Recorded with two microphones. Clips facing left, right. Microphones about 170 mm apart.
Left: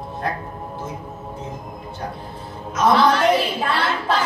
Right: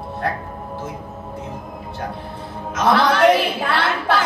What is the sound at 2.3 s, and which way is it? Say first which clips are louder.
A woman's voice: left 2 dB; 75° right (ahead or behind).